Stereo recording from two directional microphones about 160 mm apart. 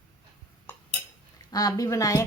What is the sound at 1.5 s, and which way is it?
Dishes, 25° left (ahead or behind).